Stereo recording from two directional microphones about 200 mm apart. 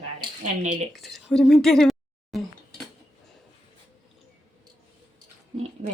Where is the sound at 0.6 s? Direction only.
35° right (ahead or behind).